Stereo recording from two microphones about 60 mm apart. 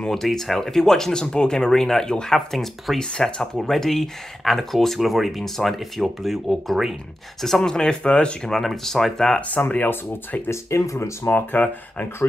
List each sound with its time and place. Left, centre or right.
0.0 s speech: centre
8.5 s speech: centre
9.7 s speech: left
10.5 s speech: left
11.2 s speech: left